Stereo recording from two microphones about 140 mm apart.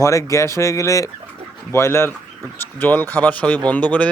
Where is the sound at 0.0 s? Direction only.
25° left (ahead or behind).